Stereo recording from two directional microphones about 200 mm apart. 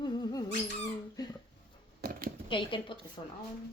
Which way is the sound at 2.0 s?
45° right (ahead or behind).